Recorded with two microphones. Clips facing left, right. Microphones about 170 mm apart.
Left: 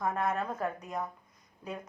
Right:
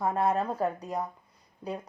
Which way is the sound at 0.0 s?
35° right (ahead or behind).